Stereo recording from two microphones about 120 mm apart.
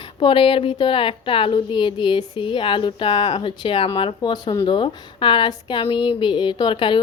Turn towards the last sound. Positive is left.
turn(degrees=45)  # may be behind; listen again after turning